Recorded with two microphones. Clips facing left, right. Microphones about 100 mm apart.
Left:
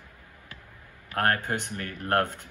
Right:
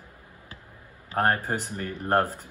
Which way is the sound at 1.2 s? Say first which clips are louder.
Right 2 dB; 20° right (ahead or behind).